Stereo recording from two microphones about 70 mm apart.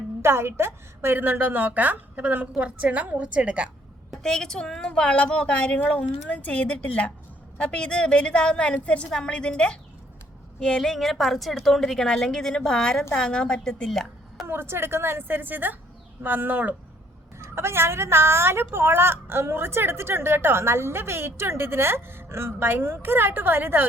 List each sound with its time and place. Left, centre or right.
0.2 s a woman's voice: right; by 3.7 s centre
4.2 s a woman's voice: centre
14.4 s a woman's voice: right
17.5 s a woman's voice: right